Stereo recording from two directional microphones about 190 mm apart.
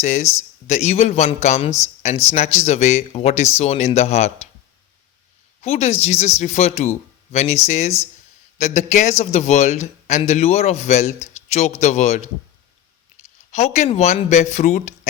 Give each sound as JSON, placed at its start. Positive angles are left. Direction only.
{"t": 0.0, "sound": "a man's voice", "side_deg": 40}
{"t": 5.6, "sound": "a man's voice", "side_deg": 35}
{"t": 13.5, "sound": "a man's voice", "side_deg": 35}